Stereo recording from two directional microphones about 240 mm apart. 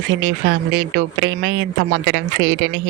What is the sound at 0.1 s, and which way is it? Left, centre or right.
Speech, right.